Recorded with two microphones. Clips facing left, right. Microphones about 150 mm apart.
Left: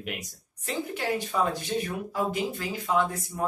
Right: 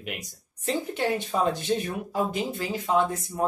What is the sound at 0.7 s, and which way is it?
Speech, 25° right (ahead or behind).